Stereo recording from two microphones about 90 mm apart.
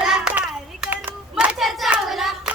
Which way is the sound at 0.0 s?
10° right (ahead or behind).